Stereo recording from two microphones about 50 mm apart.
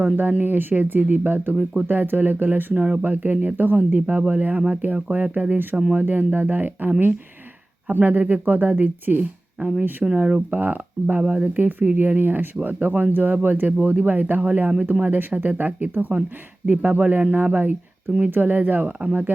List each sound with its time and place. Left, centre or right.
0.2 s speech: right
1.9 s speech: right
10.0 s speech: centre
10.5 s speech: right